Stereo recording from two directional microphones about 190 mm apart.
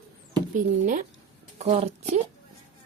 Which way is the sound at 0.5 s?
45° right (ahead or behind).